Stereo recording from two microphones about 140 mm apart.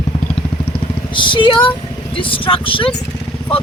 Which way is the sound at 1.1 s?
35° left (ahead or behind).